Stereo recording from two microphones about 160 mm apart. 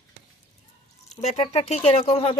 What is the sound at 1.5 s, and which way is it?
Speech, 40° left (ahead or behind).